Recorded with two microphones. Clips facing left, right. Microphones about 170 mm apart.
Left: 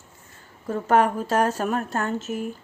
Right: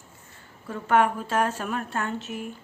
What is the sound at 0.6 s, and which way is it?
Speech, 40° left (ahead or behind).